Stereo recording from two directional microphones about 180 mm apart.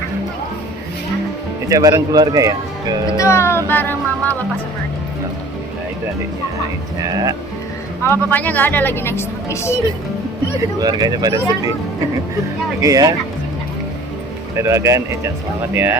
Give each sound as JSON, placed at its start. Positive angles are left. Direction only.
{"t": 1.7, "sound": "speech", "side_deg": -20}
{"t": 3.2, "sound": "a woman's voice", "side_deg": 15}
{"t": 7.1, "sound": "speech", "side_deg": -20}
{"t": 8.0, "sound": "a woman's voice", "side_deg": 10}
{"t": 10.8, "sound": "speech", "side_deg": -20}
{"t": 12.8, "sound": "speech", "side_deg": -20}
{"t": 14.5, "sound": "speech", "side_deg": -15}